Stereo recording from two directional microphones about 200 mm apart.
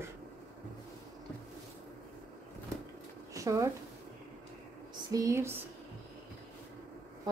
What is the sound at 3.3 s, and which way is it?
Speech, 15° right (ahead or behind).